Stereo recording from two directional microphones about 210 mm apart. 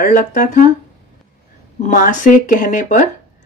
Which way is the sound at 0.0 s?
40° left (ahead or behind).